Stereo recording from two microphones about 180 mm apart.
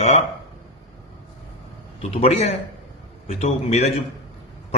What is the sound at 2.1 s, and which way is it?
Speech, 35° left (ahead or behind).